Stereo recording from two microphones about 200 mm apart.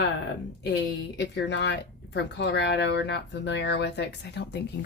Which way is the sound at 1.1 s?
60° left (ahead or behind).